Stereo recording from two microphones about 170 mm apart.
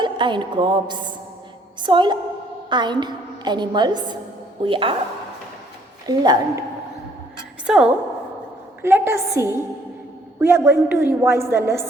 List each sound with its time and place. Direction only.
0.0 s music: 30° right (ahead or behind)
1.8 s a woman's voice: 25° right (ahead or behind)
6.1 s a woman's voice: 25° right (ahead or behind)
7.7 s a woman's voice: 5° right (ahead or behind)